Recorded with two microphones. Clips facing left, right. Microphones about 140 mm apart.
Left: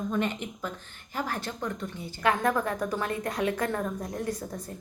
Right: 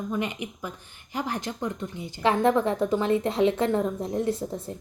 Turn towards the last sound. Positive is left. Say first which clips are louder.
# right 5 dB
turn(degrees=-25)  # may be behind; listen again after turning